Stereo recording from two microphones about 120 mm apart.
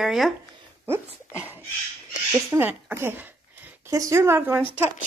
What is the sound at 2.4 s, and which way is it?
Speech, 15° right (ahead or behind).